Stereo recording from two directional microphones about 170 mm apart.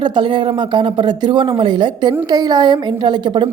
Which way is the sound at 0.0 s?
30° right (ahead or behind).